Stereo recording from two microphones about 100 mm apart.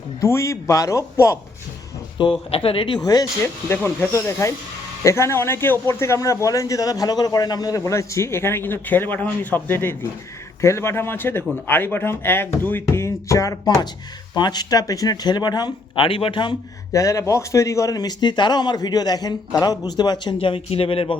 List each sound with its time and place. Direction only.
0.2 s speech: 30° left (ahead or behind)
2.5 s speech: 65° left (ahead or behind)
3.0 s speech: 45° left (ahead or behind)
3.4 s a man's voice: 20° left (ahead or behind)
14.3 s speech: 45° left (ahead or behind)
16.0 s speech: 65° left (ahead or behind)
16.9 s speech: 35° left (ahead or behind)
20.4 s speech: 70° left (ahead or behind)